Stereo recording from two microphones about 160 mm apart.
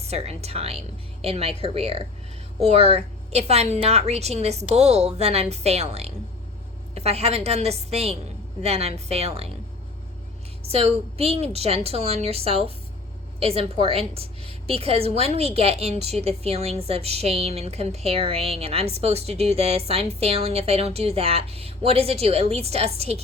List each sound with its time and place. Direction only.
0.0 s a woman's voice: 40° right (ahead or behind)
10.7 s a woman's voice: 40° right (ahead or behind)